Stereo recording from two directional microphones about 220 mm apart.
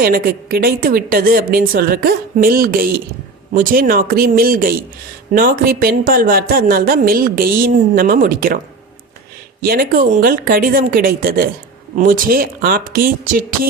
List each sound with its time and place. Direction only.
0.0 s speech: 45° right (ahead or behind)
9.6 s speech: 45° right (ahead or behind)